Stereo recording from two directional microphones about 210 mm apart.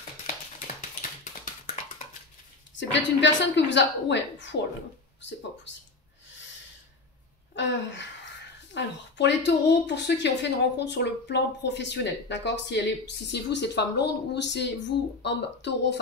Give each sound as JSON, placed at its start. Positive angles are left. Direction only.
{"t": 2.7, "sound": "speech", "side_deg": 60}
{"t": 7.5, "sound": "speech", "side_deg": 60}